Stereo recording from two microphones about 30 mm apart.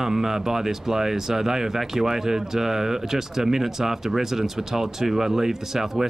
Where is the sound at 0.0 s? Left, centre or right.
Centre.